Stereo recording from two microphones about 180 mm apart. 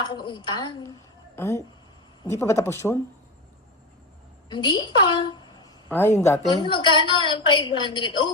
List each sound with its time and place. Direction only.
0.0 s a woman's voice: 25° left (ahead or behind)
4.4 s a woman's voice: 25° left (ahead or behind)
5.9 s speech: 15° left (ahead or behind)
6.6 s a woman's voice: 25° left (ahead or behind)